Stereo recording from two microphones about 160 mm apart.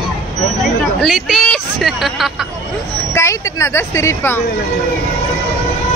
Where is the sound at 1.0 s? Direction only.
Centre (ahead or behind).